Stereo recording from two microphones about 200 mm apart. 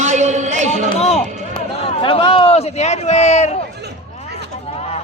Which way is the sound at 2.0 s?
25° left (ahead or behind).